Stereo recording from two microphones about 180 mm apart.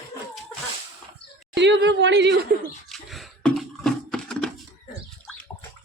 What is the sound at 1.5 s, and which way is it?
A woman's voice, 80° right.